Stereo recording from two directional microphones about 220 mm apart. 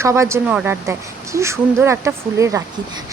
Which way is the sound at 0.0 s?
15° right (ahead or behind).